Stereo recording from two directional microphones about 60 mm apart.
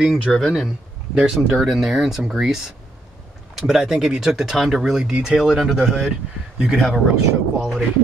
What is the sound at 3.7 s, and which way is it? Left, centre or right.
Speech, centre.